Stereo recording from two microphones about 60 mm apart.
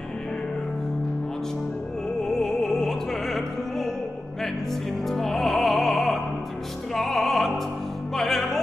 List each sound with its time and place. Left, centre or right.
2.2 s music: centre
5.0 s music: centre